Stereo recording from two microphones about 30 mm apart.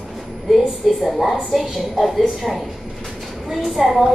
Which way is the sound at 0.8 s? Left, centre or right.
Centre.